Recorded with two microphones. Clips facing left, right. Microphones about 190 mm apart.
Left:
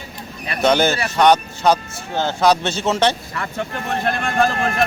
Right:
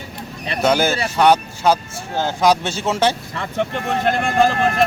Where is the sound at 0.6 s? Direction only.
5° right (ahead or behind).